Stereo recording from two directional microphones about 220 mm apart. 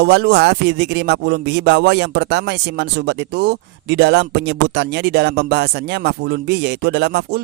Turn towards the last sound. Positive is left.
turn(degrees=-50)  # may be behind; listen again after turning